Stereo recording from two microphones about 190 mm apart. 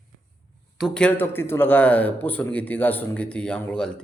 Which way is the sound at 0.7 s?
5° left (ahead or behind).